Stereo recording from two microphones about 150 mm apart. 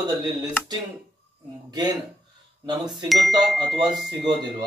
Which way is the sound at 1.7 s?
25° right (ahead or behind).